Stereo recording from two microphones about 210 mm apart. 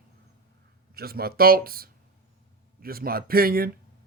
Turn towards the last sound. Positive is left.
turn(degrees=-45)  # may be behind; listen again after turning